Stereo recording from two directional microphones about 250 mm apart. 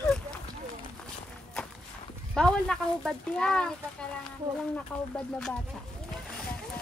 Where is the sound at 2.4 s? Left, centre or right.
Centre.